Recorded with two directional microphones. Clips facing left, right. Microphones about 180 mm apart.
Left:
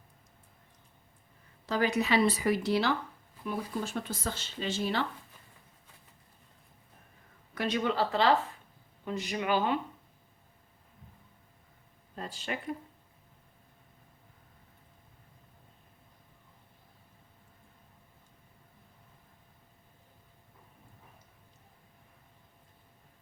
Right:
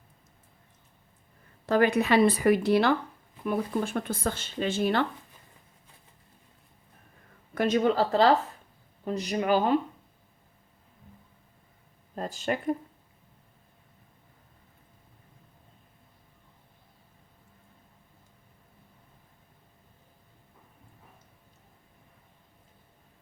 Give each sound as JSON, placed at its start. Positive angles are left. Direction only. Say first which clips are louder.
{"t": 1.6, "sound": "speech", "louder": "right 6 dB", "side_deg": -55}
{"t": 7.5, "sound": "a woman's voice", "louder": "right 6 dB", "side_deg": -45}
{"t": 12.1, "sound": "speech", "louder": "right 7 dB", "side_deg": -45}